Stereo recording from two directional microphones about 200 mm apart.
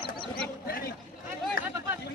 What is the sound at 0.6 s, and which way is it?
Chatter, 50° left (ahead or behind).